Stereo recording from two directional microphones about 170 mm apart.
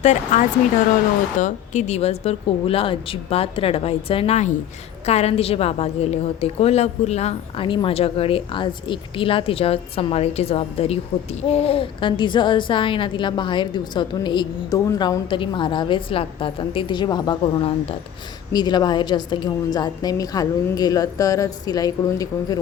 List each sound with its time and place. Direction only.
0.0 s a woman's voice: 45° left (ahead or behind); by 22.5 s 20° left (ahead or behind)